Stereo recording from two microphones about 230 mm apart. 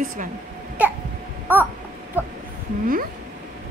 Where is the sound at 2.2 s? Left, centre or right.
Centre.